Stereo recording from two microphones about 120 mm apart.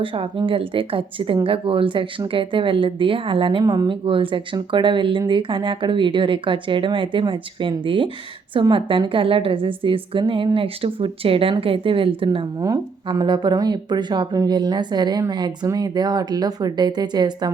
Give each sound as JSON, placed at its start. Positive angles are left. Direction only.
{"t": 0.0, "sound": "speech", "side_deg": -45}
{"t": 3.6, "sound": "speech", "side_deg": -35}
{"t": 4.0, "sound": "speech", "side_deg": -50}
{"t": 12.5, "sound": "speech", "side_deg": -30}